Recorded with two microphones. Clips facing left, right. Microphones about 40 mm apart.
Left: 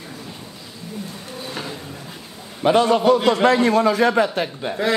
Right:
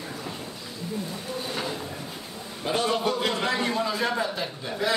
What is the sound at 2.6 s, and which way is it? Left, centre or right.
Speech, left.